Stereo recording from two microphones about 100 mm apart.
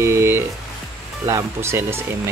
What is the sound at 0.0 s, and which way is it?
Music, 25° right (ahead or behind).